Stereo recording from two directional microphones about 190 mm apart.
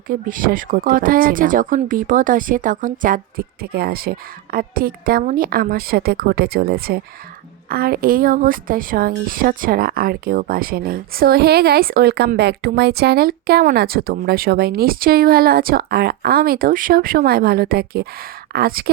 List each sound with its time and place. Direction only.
0.1 s speech: 45° right (ahead or behind)